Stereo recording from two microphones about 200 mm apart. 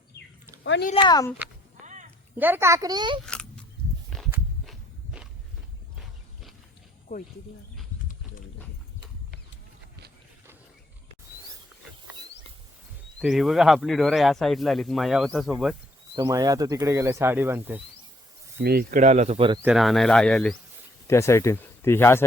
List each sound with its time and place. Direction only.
0.6 s speech: 65° left (ahead or behind)
0.9 s speech: 20° left (ahead or behind)
1.8 s a sound: 35° right (ahead or behind)
2.3 s speech: 10° right (ahead or behind)
4.1 s walk: 5° left (ahead or behind)
13.1 s speech: centre (ahead or behind)
16.1 s speech: 15° right (ahead or behind)
18.6 s speech: 50° right (ahead or behind)
19.6 s speech: centre (ahead or behind)
21.1 s speech: 15° left (ahead or behind)